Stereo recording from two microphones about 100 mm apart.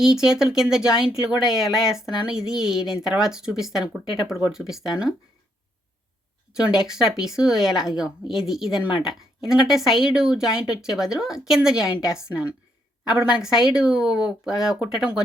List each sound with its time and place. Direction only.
0.0 s speech: 5° right (ahead or behind)
6.6 s speech: 5° right (ahead or behind)